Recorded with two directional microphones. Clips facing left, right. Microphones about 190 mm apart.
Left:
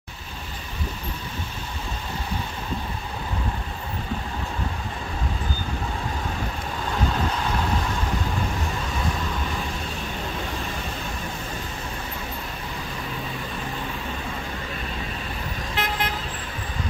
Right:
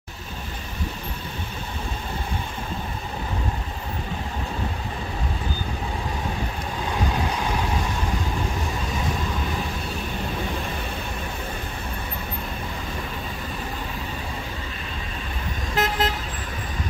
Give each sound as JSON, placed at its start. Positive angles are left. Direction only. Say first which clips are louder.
{"t": 15.7, "sound": "vehicle", "louder": "right 5 dB", "side_deg": -40}